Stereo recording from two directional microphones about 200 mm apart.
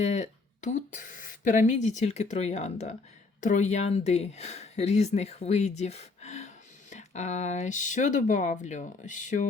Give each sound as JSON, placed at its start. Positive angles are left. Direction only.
{"t": 0.0, "sound": "speech", "side_deg": 35}